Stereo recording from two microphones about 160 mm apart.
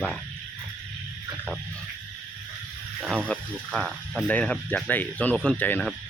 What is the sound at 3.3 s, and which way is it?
Speech, 10° left (ahead or behind).